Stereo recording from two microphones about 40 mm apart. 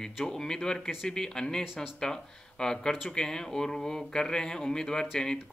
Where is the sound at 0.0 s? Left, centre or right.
Centre.